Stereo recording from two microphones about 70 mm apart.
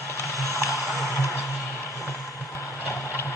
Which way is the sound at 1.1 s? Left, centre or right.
Left.